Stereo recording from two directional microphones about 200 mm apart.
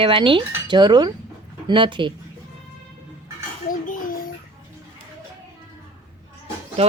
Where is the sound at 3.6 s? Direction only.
45° left (ahead or behind).